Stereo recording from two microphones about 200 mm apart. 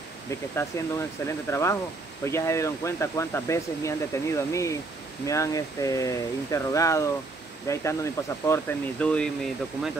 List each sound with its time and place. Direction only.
0.6 s speech: 15° left (ahead or behind)